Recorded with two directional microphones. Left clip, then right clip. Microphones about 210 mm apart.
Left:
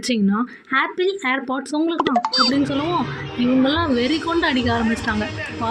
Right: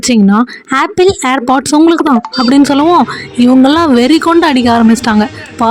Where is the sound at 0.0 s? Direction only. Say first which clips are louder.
Right 12 dB; 50° right (ahead or behind).